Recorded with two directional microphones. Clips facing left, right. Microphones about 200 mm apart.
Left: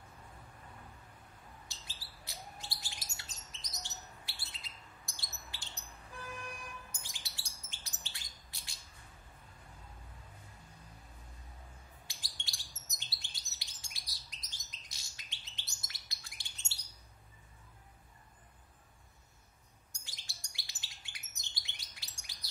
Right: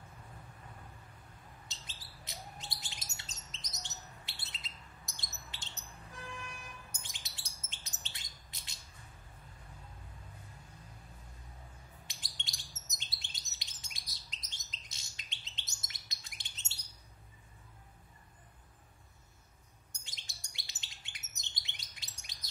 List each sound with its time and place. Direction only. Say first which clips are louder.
1.7 s bird: right 1 dB; 20° right (ahead or behind)
5.0 s chirp: even; 20° right (ahead or behind)
7.0 s bird: even; 20° right (ahead or behind)
12.1 s chirp: right 1 dB; 20° right (ahead or behind)
19.9 s bird: even; 20° right (ahead or behind)